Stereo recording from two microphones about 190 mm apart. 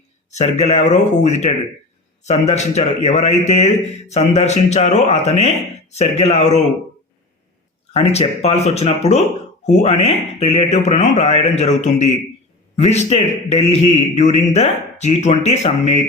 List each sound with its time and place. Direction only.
0.3 s a man's voice: 35° left (ahead or behind)
7.9 s a man's voice: 35° left (ahead or behind)